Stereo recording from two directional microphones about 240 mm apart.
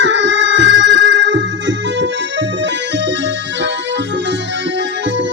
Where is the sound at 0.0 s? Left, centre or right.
Right.